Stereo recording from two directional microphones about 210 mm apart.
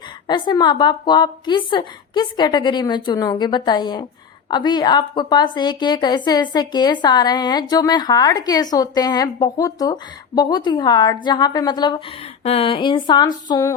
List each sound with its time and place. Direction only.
0.3 s a woman's voice: 20° left (ahead or behind)